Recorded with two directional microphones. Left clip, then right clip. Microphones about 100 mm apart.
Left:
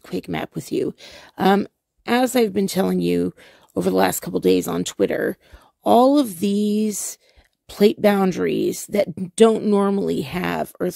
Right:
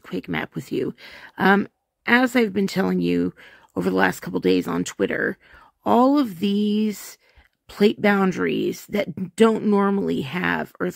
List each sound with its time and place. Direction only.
0.0 s speech: 30° left (ahead or behind)
10.0 s speech: 40° left (ahead or behind)